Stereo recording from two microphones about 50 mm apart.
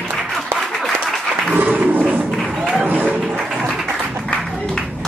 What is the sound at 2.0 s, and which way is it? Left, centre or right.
Music, right.